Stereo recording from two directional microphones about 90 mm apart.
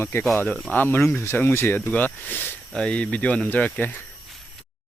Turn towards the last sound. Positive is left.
turn(degrees=15)  # may be behind; listen again after turning